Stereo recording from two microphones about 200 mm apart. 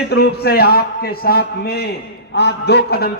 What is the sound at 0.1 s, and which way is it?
A man's voice, 55° left (ahead or behind).